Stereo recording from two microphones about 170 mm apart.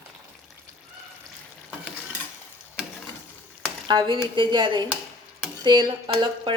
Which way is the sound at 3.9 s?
25° right (ahead or behind).